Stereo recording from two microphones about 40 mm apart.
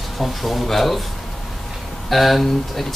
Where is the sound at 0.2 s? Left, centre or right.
Centre.